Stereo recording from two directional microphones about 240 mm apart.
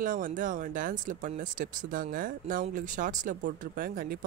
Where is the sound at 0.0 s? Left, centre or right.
Right.